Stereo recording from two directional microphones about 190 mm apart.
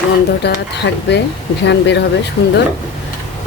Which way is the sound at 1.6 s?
65° left (ahead or behind).